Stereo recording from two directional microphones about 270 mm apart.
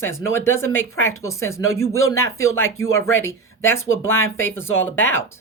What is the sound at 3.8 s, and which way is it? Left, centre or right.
Speech, left.